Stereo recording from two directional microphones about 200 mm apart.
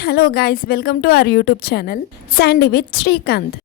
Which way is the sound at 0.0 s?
50° left (ahead or behind).